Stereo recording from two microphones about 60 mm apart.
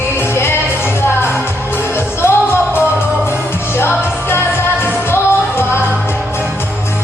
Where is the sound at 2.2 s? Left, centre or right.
Left.